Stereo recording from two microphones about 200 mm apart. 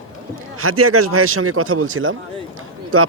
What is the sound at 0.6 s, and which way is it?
A man's voice, 90° right.